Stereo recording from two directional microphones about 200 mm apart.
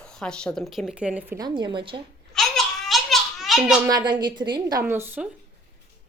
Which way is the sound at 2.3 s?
Centre (ahead or behind).